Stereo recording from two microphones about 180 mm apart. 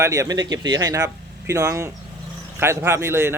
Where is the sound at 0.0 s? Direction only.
15° right (ahead or behind).